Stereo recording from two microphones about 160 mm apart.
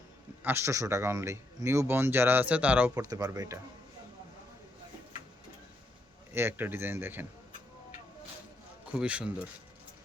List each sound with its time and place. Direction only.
0.4 s a man's voice: 15° right (ahead or behind)
2.9 s speech: 20° right (ahead or behind)
6.3 s a man's voice: 15° right (ahead or behind)
8.9 s a man's voice: 5° right (ahead or behind)